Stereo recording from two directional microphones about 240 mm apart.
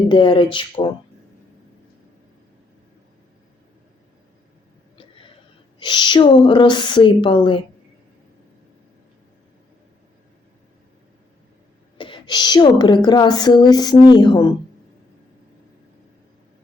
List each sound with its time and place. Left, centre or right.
0.1 s speech: centre
4.9 s a sound: left
5.8 s speech: centre
11.9 s speech: left